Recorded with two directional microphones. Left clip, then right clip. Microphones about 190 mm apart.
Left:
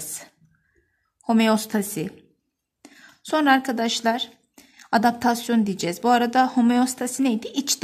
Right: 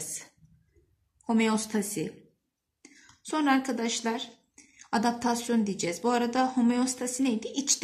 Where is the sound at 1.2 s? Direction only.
55° left (ahead or behind).